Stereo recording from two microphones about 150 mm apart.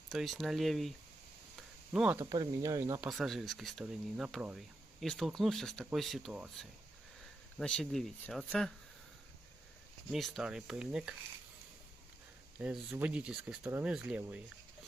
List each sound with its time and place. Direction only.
0.1 s speech: centre (ahead or behind)
1.5 s a sound: 5° right (ahead or behind)
2.1 s speech: 25° right (ahead or behind)
3.0 s speech: centre (ahead or behind)
10.1 s speech: centre (ahead or behind)
12.5 s speech: 5° right (ahead or behind)